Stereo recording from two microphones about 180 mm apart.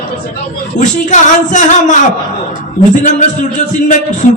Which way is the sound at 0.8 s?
40° left (ahead or behind).